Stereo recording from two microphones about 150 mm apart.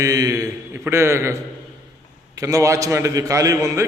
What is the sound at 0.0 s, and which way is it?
A man's voice, 25° right (ahead or behind).